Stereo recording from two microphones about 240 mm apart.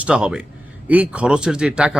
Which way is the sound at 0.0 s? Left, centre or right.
Centre.